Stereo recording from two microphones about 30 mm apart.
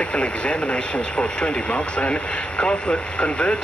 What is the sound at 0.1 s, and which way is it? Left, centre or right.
Speech, left.